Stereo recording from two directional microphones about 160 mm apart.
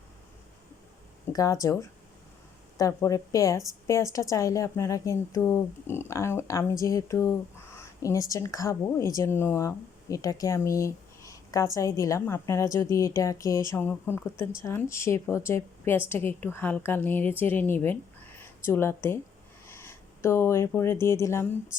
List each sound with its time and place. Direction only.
1.3 s a woman's voice: 20° left (ahead or behind)